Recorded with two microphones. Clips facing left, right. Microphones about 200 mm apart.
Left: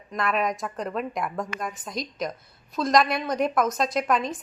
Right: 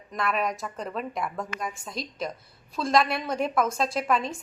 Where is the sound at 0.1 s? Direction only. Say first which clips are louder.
Left 2 dB; centre (ahead or behind).